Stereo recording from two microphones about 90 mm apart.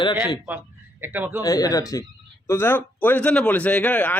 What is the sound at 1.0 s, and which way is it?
Speech, 20° right (ahead or behind).